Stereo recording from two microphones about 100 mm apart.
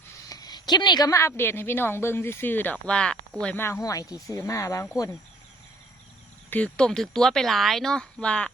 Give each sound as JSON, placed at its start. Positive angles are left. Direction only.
{"t": 0.3, "sound": "a sound", "side_deg": 40}
{"t": 1.1, "sound": "speech", "side_deg": 25}
{"t": 3.5, "sound": "speech", "side_deg": 25}
{"t": 6.5, "sound": "speech", "side_deg": 10}